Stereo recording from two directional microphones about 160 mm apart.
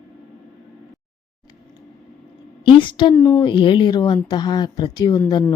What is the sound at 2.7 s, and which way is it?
Speech, 30° left (ahead or behind).